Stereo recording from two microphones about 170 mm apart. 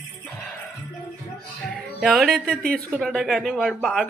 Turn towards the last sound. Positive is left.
turn(degrees=5)  # may be behind; listen again after turning